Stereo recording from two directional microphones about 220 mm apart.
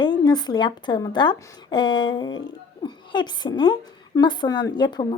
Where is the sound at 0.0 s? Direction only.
20° left (ahead or behind).